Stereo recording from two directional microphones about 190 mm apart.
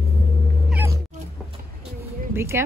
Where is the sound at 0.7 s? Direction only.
15° right (ahead or behind).